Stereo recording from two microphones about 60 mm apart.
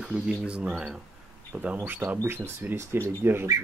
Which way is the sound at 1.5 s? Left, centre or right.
Right.